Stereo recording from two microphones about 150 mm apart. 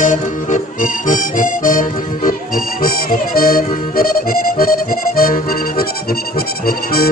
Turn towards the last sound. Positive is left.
turn(degrees=80)